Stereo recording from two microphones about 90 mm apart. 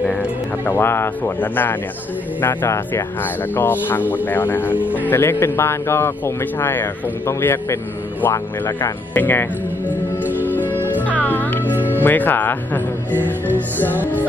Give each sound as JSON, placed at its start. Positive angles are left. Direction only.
{"t": 0.7, "sound": "speech", "side_deg": 25}
{"t": 9.8, "sound": "music", "side_deg": -20}
{"t": 10.4, "sound": "music", "side_deg": 20}
{"t": 12.0, "sound": "speech", "side_deg": 20}
{"t": 13.9, "sound": "music", "side_deg": -20}